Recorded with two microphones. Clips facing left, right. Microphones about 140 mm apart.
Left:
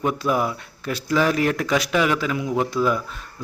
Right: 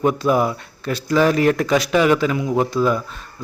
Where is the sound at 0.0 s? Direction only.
Centre (ahead or behind).